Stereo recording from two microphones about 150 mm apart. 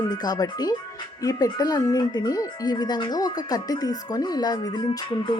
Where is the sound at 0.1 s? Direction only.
25° left (ahead or behind).